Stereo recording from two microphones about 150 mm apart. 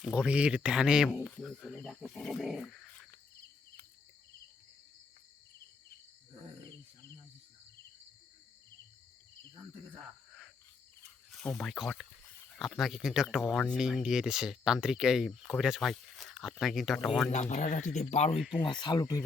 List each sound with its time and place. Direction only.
0.0 s speech: 5° right (ahead or behind)
11.3 s speech: 5° left (ahead or behind)
17.2 s speech: 50° left (ahead or behind)
18.3 s speech: centre (ahead or behind)
18.6 s speech: 30° left (ahead or behind)